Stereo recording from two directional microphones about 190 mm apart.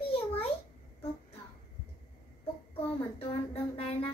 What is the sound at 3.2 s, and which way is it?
Music, 30° left (ahead or behind).